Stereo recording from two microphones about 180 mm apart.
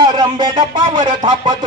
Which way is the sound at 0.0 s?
25° right (ahead or behind).